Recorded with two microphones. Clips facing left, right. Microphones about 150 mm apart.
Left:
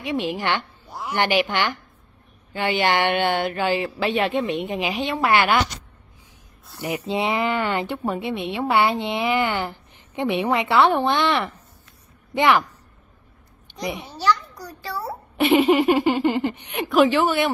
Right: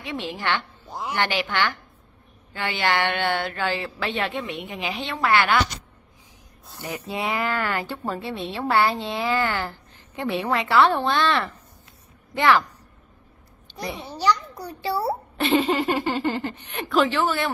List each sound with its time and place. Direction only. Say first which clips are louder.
0.0 s speech: left 5 dB; 15° left (ahead or behind)
0.8 s a sound: right 1 dB; 20° right (ahead or behind)
1.1 s speech: left 4 dB; 15° left (ahead or behind)
6.8 s speech: left 5 dB; 20° left (ahead or behind)
13.7 s a child's voice: left 3 dB; 15° left (ahead or behind)
14.1 s a child's voice: even; 15° right (ahead or behind)
14.5 s a child's voice: right 5 dB; 25° right (ahead or behind)
15.3 s speech: left 6 dB; 15° left (ahead or behind)